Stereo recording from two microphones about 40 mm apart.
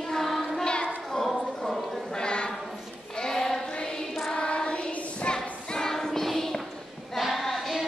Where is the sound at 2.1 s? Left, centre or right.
Left.